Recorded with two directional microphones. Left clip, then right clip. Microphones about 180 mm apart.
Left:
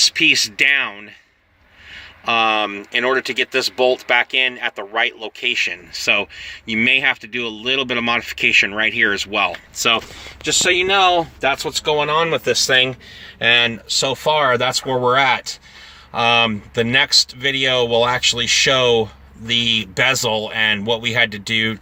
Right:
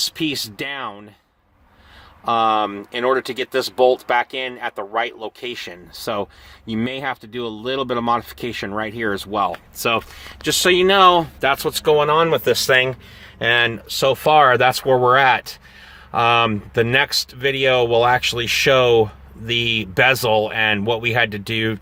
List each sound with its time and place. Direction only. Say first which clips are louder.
0.0 s speech: left 9 dB; 30° right (ahead or behind)
2.2 s speech: left 1 dB; 25° right (ahead or behind)
10.4 s speech: right 1 dB; 40° right (ahead or behind)